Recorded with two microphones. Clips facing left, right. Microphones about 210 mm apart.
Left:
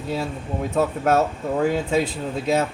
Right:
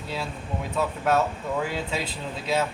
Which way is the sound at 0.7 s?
45° left (ahead or behind).